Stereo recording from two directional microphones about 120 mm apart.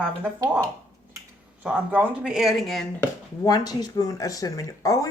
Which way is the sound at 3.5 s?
35° left (ahead or behind).